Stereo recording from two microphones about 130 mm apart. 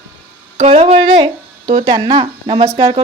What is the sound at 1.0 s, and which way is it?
A woman's voice, 35° right (ahead or behind).